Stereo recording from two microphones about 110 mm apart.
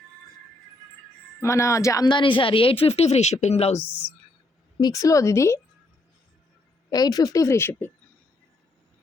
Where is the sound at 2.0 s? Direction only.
45° left (ahead or behind); by 3.8 s 80° left.